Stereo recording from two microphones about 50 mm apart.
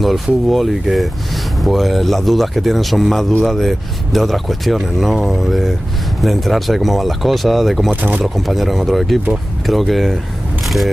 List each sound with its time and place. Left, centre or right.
0.0 s speech: centre
7.9 s speech: right
8.2 s speech: centre